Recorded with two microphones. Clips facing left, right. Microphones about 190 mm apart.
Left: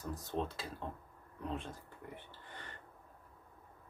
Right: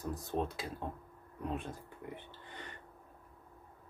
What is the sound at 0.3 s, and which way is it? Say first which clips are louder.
Speech: right 2 dB; 15° right (ahead or behind).